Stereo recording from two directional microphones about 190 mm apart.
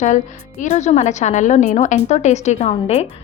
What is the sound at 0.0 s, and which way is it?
A woman's voice, 40° left (ahead or behind).